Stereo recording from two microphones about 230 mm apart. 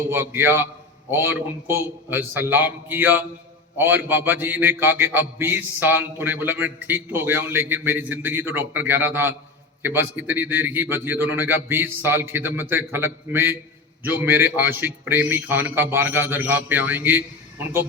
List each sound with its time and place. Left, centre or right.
0.1 s a man's voice: centre